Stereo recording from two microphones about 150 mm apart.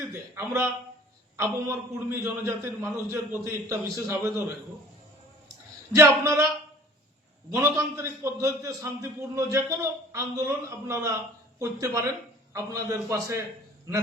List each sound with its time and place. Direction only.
0.1 s a man's voice: 15° right (ahead or behind)
5.9 s a man's voice: 15° right (ahead or behind)
7.5 s a man's voice: 15° right (ahead or behind)